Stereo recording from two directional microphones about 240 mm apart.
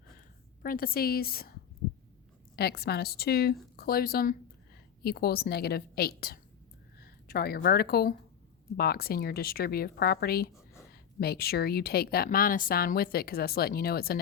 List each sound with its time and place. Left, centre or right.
0.6 s a woman's voice: left
2.6 s a woman's voice: left